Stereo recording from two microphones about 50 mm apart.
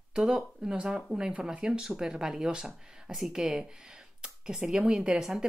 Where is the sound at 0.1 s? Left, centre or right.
Centre.